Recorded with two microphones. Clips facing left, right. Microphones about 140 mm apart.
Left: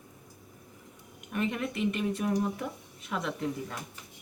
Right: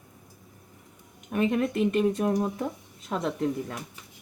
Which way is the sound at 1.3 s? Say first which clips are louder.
Right 7 dB; 45° right (ahead or behind).